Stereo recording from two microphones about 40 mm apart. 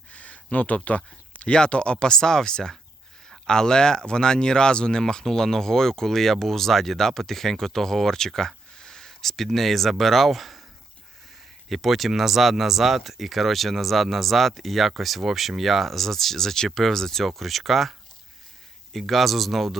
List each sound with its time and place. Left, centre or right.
0.1 s a sound: left
0.9 s speech: left; by 8.5 s centre
8.8 s a sound: centre
10.0 s speech: centre
11.7 s speech: centre
17.2 s speech: centre
18.9 s speech: centre